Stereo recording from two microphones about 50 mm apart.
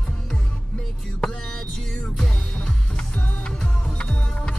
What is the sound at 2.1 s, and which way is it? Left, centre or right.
Music, centre.